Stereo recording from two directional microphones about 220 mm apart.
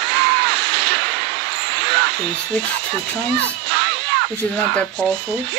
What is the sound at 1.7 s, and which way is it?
Basketball bounce, 50° right (ahead or behind).